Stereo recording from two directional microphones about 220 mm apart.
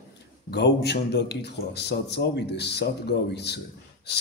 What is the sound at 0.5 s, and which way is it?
A man's voice, 50° left (ahead or behind).